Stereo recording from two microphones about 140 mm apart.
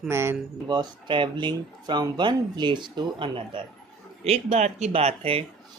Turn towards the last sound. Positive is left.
turn(degrees=-45)  # may be behind; listen again after turning